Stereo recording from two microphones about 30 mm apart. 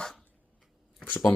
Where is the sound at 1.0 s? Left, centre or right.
Left.